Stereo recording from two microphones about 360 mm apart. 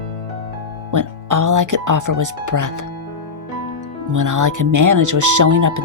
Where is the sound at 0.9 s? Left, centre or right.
Right.